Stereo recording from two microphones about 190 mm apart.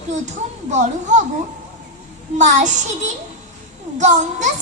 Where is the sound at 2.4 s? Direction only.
40° right (ahead or behind).